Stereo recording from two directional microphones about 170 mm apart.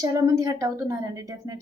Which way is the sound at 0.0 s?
20° right (ahead or behind).